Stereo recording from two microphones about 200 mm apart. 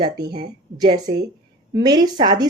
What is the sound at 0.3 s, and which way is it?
Speech, 55° right (ahead or behind).